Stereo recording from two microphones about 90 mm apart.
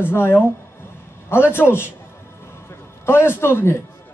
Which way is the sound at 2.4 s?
30° left (ahead or behind).